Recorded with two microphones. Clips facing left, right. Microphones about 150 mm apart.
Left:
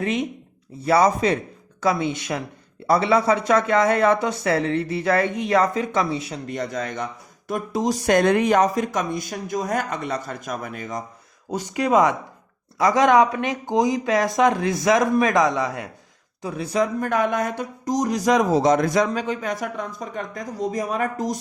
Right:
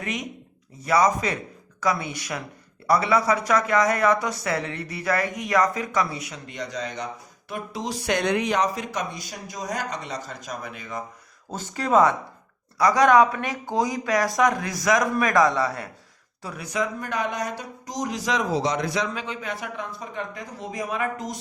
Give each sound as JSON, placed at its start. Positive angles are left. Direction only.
{"t": 0.0, "sound": "speech", "side_deg": 30}
{"t": 6.5, "sound": "speech", "side_deg": 50}
{"t": 11.5, "sound": "speech", "side_deg": 15}
{"t": 17.0, "sound": "speech", "side_deg": 50}